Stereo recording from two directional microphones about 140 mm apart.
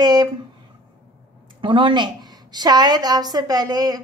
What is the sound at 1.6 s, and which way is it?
A woman's voice, 35° right (ahead or behind).